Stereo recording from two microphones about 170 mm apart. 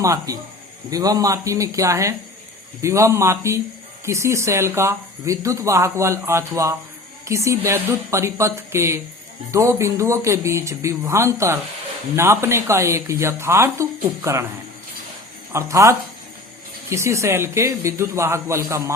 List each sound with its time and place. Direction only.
0.0 s speech: 20° right (ahead or behind)
15.5 s speech: 15° right (ahead or behind)